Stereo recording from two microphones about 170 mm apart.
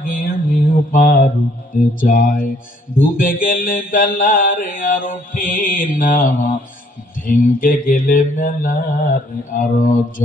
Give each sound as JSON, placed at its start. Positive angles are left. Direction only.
{"t": 0.0, "sound": "mantra", "side_deg": 55}